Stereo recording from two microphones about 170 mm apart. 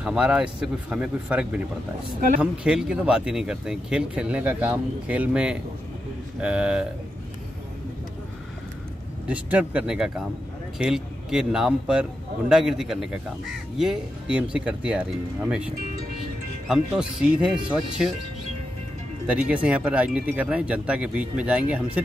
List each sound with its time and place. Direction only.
0.0 s speech: 5° right (ahead or behind)
2.1 s speech: 55° right (ahead or behind)
2.4 s speech: 5° right (ahead or behind)
9.3 s speech: 10° right (ahead or behind)
19.2 s speech: 5° right (ahead or behind)